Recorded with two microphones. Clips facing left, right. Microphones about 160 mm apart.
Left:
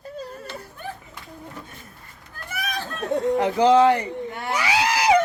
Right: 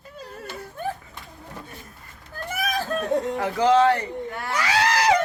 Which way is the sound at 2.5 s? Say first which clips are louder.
Right 3 dB; 40° right (ahead or behind).